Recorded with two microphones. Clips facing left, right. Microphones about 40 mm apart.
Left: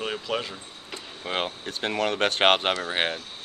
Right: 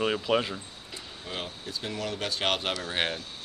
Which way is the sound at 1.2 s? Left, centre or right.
Left.